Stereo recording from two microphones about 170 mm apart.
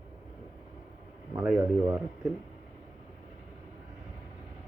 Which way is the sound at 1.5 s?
10° right (ahead or behind).